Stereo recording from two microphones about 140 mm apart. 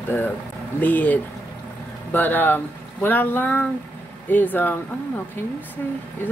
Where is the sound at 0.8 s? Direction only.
10° left (ahead or behind).